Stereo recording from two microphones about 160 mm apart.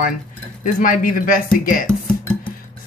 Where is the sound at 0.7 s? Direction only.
60° left (ahead or behind).